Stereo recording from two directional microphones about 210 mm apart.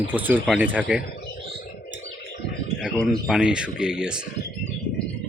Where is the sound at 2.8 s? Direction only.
Centre (ahead or behind).